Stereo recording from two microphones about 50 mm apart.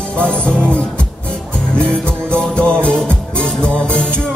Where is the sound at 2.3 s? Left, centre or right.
Centre.